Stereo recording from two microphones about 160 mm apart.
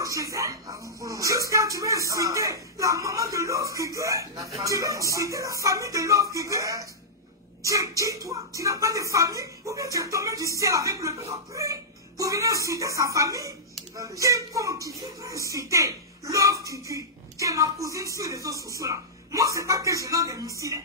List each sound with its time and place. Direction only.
0.0 s speech: 20° right (ahead or behind)